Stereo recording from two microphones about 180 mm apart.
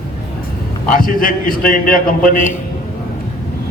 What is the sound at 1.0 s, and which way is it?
A man's voice, 50° left (ahead or behind).